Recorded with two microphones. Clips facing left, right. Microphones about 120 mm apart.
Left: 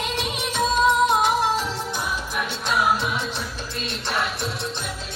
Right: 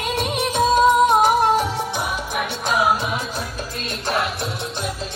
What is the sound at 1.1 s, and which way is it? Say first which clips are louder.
Music: right 5 dB; 50° right (ahead or behind).